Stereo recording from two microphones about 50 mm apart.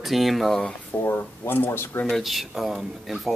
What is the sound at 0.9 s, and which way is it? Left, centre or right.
Speech, left.